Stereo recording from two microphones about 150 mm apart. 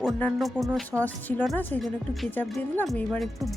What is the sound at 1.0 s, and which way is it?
Speech, 10° left (ahead or behind).